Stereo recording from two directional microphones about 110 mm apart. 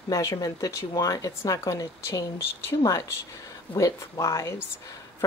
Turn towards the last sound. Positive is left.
turn(degrees=30)  # may be behind; listen again after turning